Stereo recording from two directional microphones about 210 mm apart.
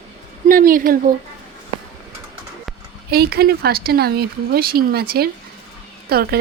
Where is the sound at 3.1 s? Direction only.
50° right (ahead or behind).